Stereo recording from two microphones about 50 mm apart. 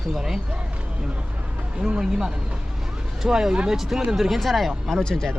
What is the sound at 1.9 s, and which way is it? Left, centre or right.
Speech, centre.